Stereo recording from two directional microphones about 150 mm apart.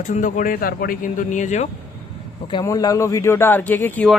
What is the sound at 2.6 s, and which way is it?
Speech, 25° left (ahead or behind).